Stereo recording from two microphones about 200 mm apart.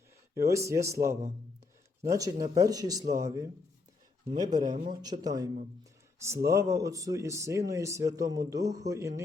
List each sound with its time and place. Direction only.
0.3 s speech: 15° right (ahead or behind)
4.5 s speech: 20° right (ahead or behind)